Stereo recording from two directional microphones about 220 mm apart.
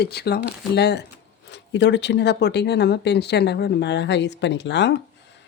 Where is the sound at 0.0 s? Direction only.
45° left (ahead or behind).